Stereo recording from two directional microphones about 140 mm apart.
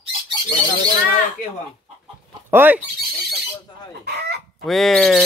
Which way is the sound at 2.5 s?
15° right (ahead or behind).